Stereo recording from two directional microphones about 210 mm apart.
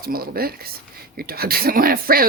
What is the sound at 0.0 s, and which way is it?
Speech, 45° right (ahead or behind).